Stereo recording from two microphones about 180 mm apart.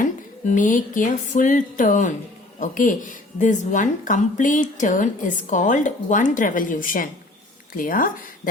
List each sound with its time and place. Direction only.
0.0 s a woman's voice: 45° left (ahead or behind)